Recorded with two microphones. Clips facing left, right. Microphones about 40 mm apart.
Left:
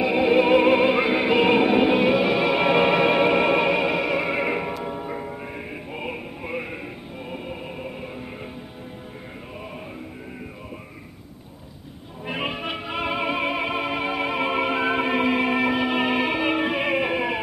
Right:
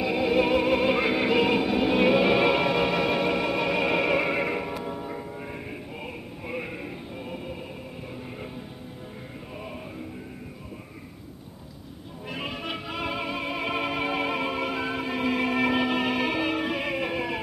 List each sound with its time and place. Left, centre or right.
0.0 s music: left
2.0 s music: centre
2.6 s music: left
3.8 s music: centre
4.5 s music: left
12.3 s music: left
12.5 s music: centre
13.7 s music: centre
14.4 s music: left
15.2 s music: left
15.6 s music: centre; by 17.4 s left